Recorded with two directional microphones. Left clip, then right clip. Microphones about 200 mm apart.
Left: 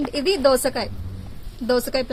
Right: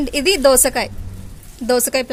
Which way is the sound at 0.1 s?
70° right (ahead or behind).